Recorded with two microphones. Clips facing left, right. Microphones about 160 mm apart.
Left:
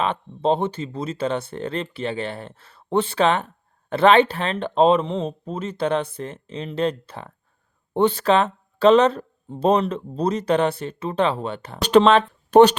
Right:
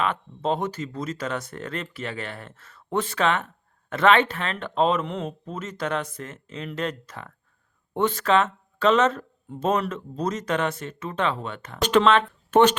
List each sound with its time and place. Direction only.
0.0 s speech: 30° left (ahead or behind)